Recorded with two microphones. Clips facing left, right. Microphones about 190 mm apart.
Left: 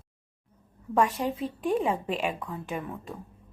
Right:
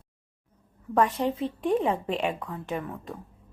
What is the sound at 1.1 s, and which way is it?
Speech, 25° right (ahead or behind).